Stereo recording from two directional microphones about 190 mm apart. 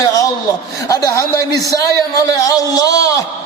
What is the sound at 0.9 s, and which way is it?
Music, 20° left (ahead or behind).